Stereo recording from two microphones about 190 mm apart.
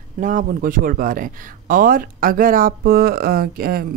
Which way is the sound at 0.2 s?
40° right (ahead or behind).